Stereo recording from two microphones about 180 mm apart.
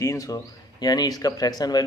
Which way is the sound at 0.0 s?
20° left (ahead or behind).